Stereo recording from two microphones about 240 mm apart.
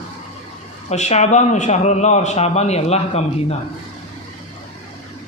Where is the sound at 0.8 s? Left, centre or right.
Left.